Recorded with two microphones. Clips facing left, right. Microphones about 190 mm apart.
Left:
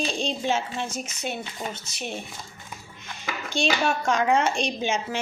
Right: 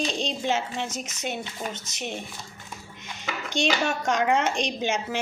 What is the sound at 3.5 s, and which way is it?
Speech, 20° right (ahead or behind).